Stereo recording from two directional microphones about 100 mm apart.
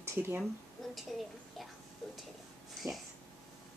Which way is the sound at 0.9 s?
Centre (ahead or behind).